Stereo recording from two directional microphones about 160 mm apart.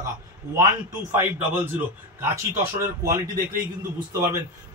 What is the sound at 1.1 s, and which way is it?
Speech, 15° right (ahead or behind).